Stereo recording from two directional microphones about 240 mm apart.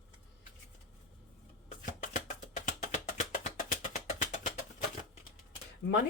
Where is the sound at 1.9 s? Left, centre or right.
Left.